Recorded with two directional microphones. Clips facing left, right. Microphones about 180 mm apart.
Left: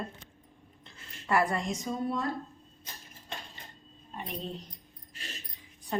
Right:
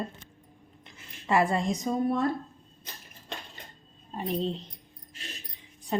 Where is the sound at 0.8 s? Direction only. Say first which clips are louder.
Right 3 dB; 25° right (ahead or behind).